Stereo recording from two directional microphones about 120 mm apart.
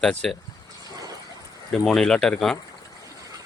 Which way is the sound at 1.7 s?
5° left (ahead or behind).